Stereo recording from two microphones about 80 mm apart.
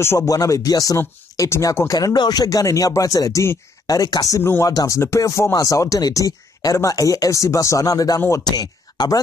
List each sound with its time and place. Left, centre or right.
0.0 s speech: left
0.3 s speech: left
4.4 s speech: left
4.6 s speech: left